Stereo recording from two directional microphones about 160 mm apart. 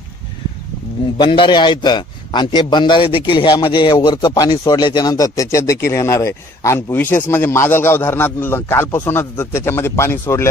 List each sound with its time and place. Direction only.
1.1 s a man's voice: 30° left (ahead or behind)